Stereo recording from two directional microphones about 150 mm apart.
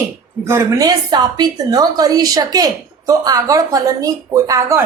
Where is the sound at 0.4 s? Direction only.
20° right (ahead or behind).